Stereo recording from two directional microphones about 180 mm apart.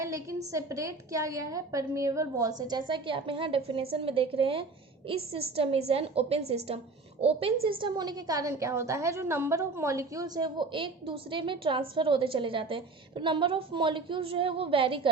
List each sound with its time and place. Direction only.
0.0 s a woman's voice: 15° right (ahead or behind)